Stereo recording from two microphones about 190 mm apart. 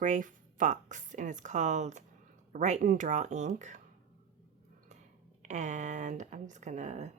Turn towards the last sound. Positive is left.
turn(degrees=-35)  # may be behind; listen again after turning